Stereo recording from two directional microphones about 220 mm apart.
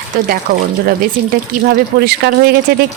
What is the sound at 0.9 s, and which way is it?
A woman's voice, 45° right (ahead or behind).